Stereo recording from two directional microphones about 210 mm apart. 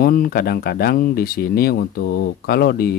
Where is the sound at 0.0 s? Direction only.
45° left (ahead or behind).